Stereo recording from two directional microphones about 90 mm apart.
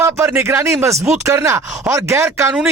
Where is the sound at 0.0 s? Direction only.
30° right (ahead or behind).